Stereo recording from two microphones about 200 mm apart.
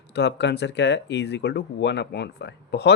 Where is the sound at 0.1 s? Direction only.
55° left (ahead or behind).